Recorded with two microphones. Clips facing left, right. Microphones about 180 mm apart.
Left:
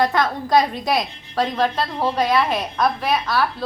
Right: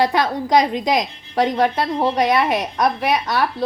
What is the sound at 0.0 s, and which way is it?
A woman's voice, 20° right (ahead or behind).